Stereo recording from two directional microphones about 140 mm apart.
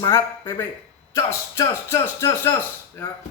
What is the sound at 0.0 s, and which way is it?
A man's voice, 20° left (ahead or behind).